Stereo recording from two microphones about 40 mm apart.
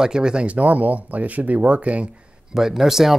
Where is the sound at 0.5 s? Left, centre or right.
Right.